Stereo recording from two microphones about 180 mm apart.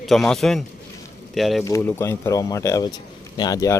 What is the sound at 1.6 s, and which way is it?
Speech, 15° left (ahead or behind).